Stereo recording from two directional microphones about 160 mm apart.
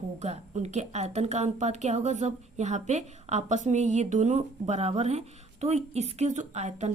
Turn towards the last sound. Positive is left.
turn(degrees=-45)  # may be behind; listen again after turning